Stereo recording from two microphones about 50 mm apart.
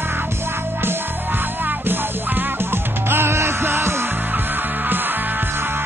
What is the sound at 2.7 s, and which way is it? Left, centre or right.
Music, right.